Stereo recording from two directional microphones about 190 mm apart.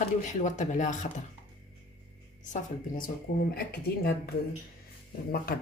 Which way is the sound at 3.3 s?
55° left (ahead or behind).